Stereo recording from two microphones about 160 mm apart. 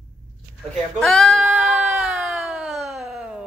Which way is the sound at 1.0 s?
Centre (ahead or behind).